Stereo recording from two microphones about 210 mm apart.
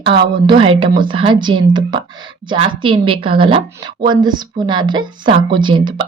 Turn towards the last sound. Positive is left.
turn(degrees=-20)  # may be behind; listen again after turning